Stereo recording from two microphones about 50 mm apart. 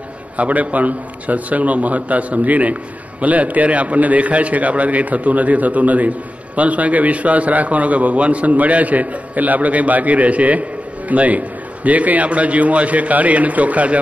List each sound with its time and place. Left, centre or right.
0.4 s a man's voice: right